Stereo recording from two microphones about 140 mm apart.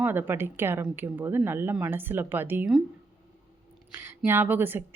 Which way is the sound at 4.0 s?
15° right (ahead or behind).